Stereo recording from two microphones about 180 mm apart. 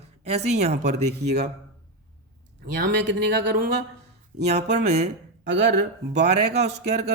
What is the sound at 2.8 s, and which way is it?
Speech, 80° right.